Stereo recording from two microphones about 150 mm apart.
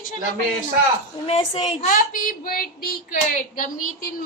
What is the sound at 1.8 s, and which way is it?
Speech, 65° left (ahead or behind).